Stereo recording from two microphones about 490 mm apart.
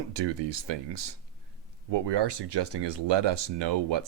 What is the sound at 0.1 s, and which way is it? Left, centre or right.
Speech, right.